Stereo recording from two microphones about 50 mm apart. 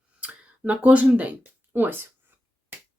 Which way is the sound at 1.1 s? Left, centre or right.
Right.